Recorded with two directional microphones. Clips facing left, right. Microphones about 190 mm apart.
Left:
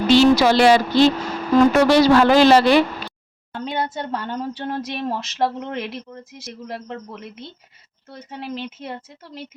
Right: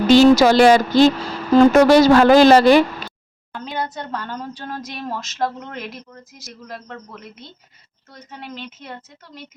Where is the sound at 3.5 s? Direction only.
25° left (ahead or behind).